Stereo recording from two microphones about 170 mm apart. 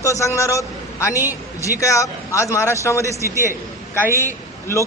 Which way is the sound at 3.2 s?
15° right (ahead or behind).